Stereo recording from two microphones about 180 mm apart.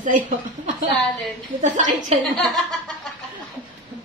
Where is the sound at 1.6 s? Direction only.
45° right (ahead or behind).